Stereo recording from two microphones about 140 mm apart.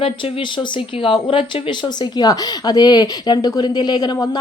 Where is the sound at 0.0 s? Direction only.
35° left (ahead or behind).